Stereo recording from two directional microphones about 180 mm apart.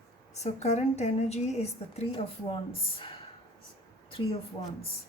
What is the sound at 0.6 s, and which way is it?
A woman's voice, 40° left (ahead or behind).